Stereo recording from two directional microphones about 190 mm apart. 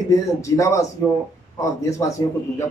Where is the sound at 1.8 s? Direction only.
15° left (ahead or behind).